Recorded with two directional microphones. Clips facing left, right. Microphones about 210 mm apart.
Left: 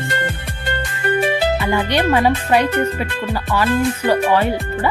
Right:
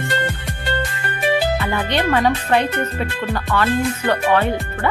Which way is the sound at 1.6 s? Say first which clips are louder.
Left 3 dB; 15° left (ahead or behind).